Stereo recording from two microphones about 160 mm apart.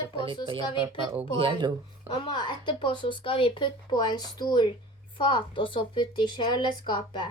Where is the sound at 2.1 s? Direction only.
30° left (ahead or behind).